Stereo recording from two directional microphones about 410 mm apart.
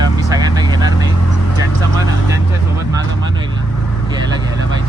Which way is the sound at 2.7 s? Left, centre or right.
Centre.